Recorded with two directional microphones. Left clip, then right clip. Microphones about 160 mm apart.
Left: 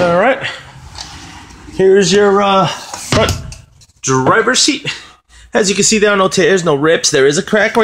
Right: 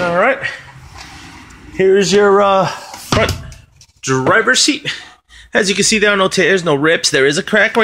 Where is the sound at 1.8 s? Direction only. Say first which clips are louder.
Left 2 dB; 10° left (ahead or behind).